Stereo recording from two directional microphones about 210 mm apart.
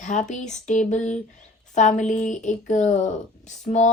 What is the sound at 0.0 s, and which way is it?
Speech, 35° left (ahead or behind).